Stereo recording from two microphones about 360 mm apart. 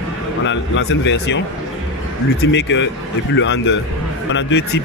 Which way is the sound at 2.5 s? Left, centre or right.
Left.